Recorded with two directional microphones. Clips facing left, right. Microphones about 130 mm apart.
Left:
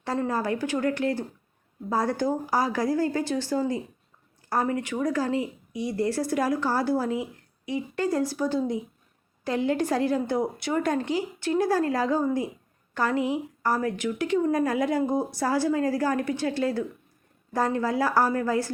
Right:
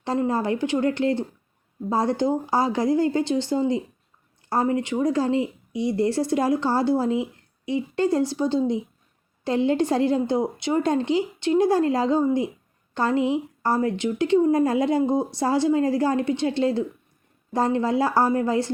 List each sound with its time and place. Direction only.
0.0 s speech: 25° right (ahead or behind)